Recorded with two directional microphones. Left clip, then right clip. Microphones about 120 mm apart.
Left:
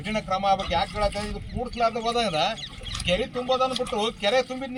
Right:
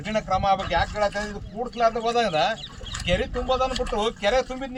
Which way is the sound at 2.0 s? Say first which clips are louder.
Right 2 dB; 65° right (ahead or behind).